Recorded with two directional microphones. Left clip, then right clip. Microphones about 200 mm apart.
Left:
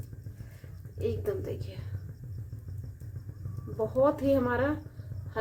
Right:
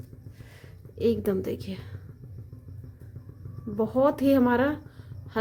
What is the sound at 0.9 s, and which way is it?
Speech, 50° right (ahead or behind).